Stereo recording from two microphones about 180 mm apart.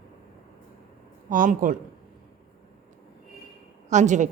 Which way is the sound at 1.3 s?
50° right (ahead or behind).